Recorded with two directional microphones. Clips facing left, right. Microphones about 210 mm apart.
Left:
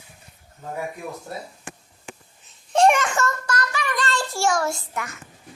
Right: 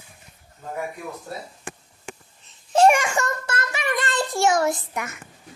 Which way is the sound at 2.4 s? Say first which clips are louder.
Right 1 dB; 5° right (ahead or behind).